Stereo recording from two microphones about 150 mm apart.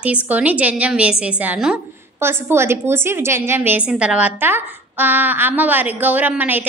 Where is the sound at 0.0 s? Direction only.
10° right (ahead or behind).